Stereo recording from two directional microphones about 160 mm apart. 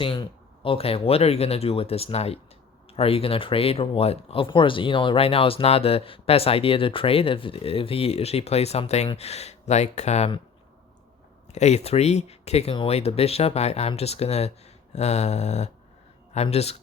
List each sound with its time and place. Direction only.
0.0 s speech: 35° left (ahead or behind)
11.5 s speech: 45° left (ahead or behind)